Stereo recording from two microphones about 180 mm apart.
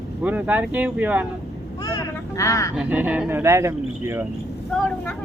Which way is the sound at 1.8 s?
20° left (ahead or behind).